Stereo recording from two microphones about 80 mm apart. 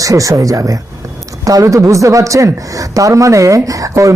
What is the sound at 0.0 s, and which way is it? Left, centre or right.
A woman's voice, right.